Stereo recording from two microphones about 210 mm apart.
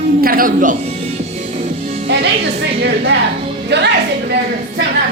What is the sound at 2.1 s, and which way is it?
A woman's voice, 55° right (ahead or behind).